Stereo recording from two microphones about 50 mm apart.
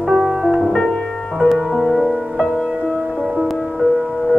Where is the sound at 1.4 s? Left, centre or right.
Centre.